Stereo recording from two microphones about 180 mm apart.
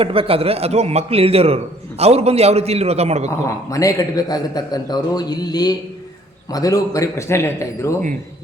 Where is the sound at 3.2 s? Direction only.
20° left (ahead or behind).